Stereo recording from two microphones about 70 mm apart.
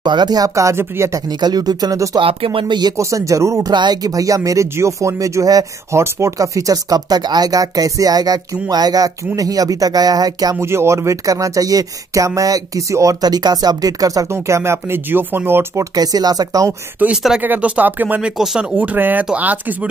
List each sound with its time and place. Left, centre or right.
0.0 s speech: right
1.4 s speech: right
3.0 s speech: right
3.7 s speech: right
5.9 s speech: right
10.6 s speech: right
13.2 s speech: right
14.3 s speech: right
15.9 s speech: right
17.1 s speech: centre
17.4 s speech: right
18.2 s speech: centre
18.8 s speech: right